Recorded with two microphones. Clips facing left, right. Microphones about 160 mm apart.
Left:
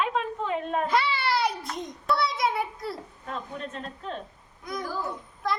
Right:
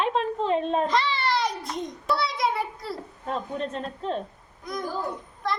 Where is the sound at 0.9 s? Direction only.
5° left (ahead or behind).